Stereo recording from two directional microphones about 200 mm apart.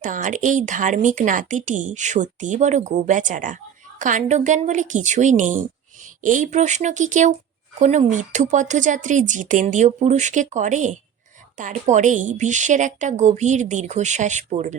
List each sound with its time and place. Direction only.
0.0 s speech: 40° right (ahead or behind)